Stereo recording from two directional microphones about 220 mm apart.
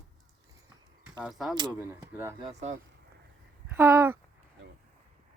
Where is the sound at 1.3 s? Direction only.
Centre (ahead or behind).